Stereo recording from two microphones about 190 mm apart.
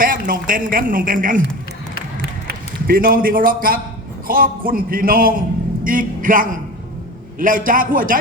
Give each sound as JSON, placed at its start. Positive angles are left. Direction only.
{"t": 0.0, "sound": "speech", "side_deg": -45}
{"t": 2.8, "sound": "speech", "side_deg": -50}